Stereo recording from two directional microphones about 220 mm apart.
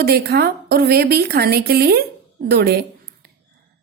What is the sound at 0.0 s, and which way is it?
A woman's voice, 45° right (ahead or behind).